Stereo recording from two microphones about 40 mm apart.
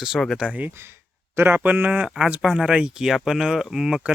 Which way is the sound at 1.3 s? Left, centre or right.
Right.